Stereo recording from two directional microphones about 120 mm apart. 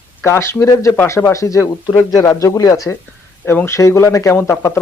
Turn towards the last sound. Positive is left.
turn(degrees=20)  # may be behind; listen again after turning